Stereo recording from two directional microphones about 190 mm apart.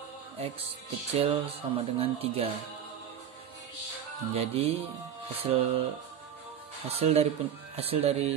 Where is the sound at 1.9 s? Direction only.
30° right (ahead or behind).